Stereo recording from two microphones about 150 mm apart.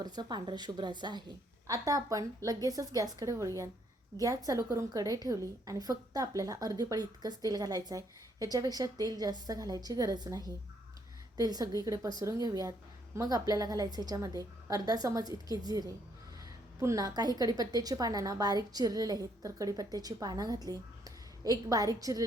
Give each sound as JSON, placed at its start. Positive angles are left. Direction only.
{"t": 0.0, "sound": "a woman's voice", "side_deg": -30}